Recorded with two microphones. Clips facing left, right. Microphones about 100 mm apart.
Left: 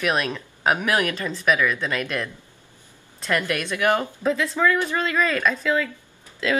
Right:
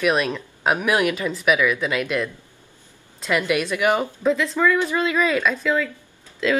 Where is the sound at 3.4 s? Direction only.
10° right (ahead or behind).